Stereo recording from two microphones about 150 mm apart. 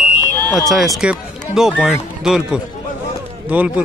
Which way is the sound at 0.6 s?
Centre (ahead or behind).